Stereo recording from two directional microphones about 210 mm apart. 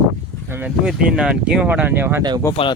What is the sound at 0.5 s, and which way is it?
Speech, 5° right (ahead or behind).